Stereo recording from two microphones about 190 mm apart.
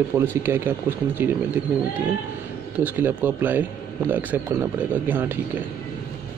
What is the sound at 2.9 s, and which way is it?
Speech, 10° right (ahead or behind).